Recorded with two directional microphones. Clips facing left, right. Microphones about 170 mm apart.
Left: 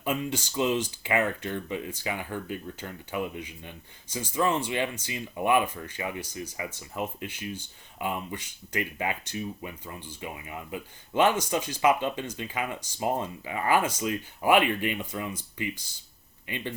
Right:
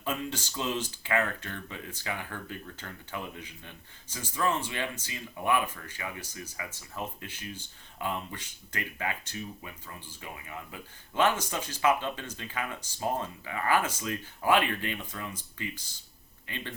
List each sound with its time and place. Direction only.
0.0 s speech: 15° left (ahead or behind)